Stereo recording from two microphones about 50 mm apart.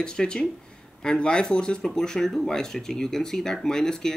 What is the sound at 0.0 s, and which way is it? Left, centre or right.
Speech, centre.